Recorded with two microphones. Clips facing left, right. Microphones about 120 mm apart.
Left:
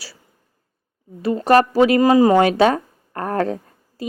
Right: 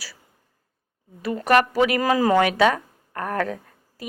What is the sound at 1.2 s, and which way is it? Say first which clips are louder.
Speech: left 4 dB; 30° left (ahead or behind).